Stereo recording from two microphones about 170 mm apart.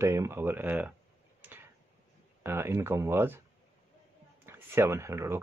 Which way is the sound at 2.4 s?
15° right (ahead or behind).